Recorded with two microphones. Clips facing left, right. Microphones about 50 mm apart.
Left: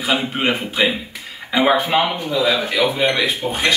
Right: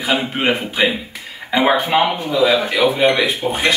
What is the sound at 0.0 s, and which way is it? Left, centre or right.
A man's voice, centre.